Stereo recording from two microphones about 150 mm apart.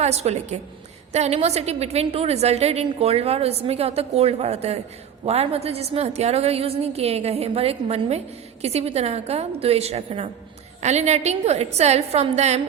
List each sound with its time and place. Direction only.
0.0 s a woman's voice: 45° right (ahead or behind)